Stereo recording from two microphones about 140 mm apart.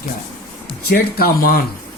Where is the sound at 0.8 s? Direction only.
90° left.